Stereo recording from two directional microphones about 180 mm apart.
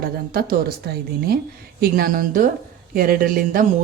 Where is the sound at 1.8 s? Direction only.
55° right (ahead or behind).